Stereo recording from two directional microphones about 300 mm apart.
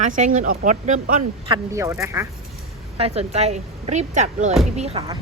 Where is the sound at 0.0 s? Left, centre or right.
Right.